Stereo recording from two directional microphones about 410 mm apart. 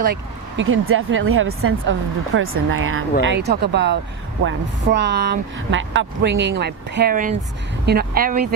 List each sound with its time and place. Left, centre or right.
0.0 s speech: right